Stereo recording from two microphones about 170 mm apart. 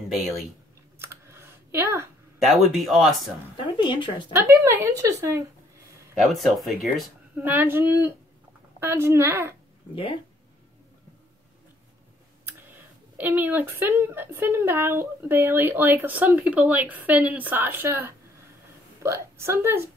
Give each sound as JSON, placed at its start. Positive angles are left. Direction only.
{"t": 0.9, "sound": "computer keyboard", "side_deg": -15}
{"t": 2.3, "sound": "speech", "side_deg": 0}
{"t": 3.7, "sound": "speech", "side_deg": 25}
{"t": 4.3, "sound": "speech", "side_deg": -15}
{"t": 6.2, "sound": "speech", "side_deg": 0}
{"t": 7.4, "sound": "speech", "side_deg": -10}
{"t": 13.2, "sound": "speech", "side_deg": -10}